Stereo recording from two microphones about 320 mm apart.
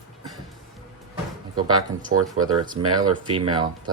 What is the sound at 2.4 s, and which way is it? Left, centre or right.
Speech, right.